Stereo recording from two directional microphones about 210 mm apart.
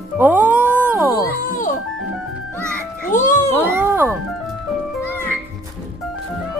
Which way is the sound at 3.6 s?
10° right (ahead or behind).